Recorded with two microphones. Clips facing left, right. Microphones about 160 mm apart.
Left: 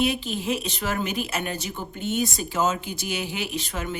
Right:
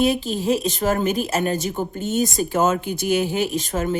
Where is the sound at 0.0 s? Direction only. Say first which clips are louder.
Right 5 dB; 40° right (ahead or behind).